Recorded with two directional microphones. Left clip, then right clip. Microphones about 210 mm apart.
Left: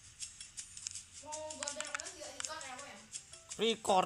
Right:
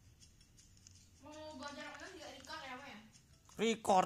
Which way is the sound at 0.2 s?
45° left (ahead or behind).